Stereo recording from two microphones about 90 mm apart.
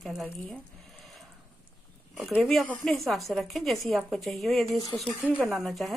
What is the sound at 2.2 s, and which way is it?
Speech, centre (ahead or behind).